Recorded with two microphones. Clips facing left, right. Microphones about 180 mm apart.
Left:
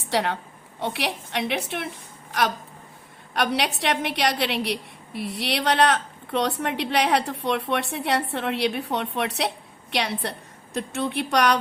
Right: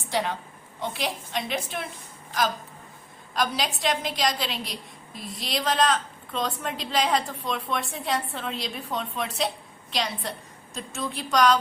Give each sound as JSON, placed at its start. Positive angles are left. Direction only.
{"t": 0.0, "sound": "a woman's voice", "side_deg": 70}
{"t": 3.3, "sound": "a woman's voice", "side_deg": 70}